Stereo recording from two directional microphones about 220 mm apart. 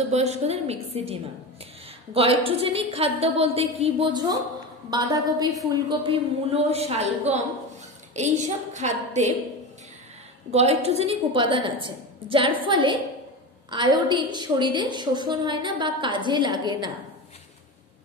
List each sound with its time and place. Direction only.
0.1 s a woman's voice: 30° right (ahead or behind)
10.5 s a woman's voice: 30° right (ahead or behind)